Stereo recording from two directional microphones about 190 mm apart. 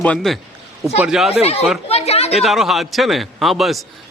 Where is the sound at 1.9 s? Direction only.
35° left (ahead or behind).